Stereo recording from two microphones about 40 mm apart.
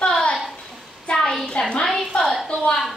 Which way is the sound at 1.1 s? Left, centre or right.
Left.